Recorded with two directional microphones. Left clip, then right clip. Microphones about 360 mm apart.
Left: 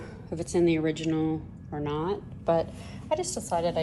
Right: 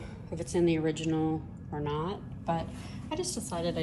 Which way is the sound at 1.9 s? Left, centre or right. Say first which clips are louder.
Left 5 dB; centre.